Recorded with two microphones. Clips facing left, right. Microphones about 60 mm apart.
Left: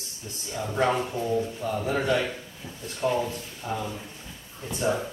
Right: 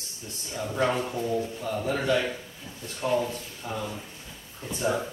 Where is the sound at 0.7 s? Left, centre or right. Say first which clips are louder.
Left 2 dB; centre.